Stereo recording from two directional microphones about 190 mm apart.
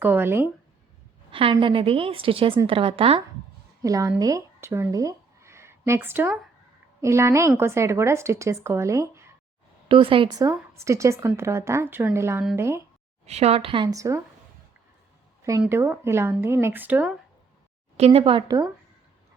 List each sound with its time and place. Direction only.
0.0 s a woman's voice: 10° right (ahead or behind)
1.3 s a woman's voice: 30° right (ahead or behind)
3.8 s a woman's voice: 15° right (ahead or behind)
9.9 s a woman's voice: 30° right (ahead or behind)
13.2 s a woman's voice: 35° right (ahead or behind); by 14.2 s 15° right (ahead or behind)
15.4 s a sound: 15° right (ahead or behind)
15.6 s a woman's voice: 10° right (ahead or behind)
17.9 s a woman's voice: 30° right (ahead or behind)